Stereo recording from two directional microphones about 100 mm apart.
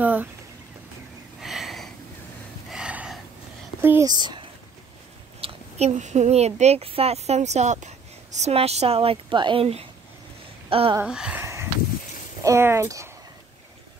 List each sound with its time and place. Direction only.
0.0 s a sound: 15° right (ahead or behind)
1.4 s a sound: centre (ahead or behind)
2.7 s gasp: 10° right (ahead or behind)
4.0 s speech: 45° right (ahead or behind)
5.4 s speech: 90° right; by 9.7 s 55° right (ahead or behind)
10.7 s speech: 65° right (ahead or behind)
11.1 s speech: 5° right (ahead or behind)
11.3 s a sound: 25° right (ahead or behind)
12.4 s speech: 25° right (ahead or behind)